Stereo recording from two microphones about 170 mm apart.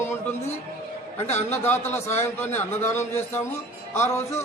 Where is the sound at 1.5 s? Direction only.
15° left (ahead or behind).